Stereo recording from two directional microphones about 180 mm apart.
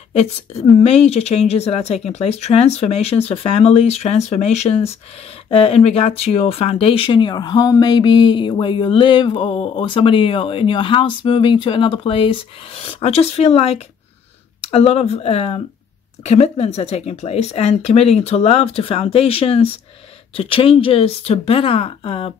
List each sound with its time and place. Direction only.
0.1 s speech: 35° left (ahead or behind)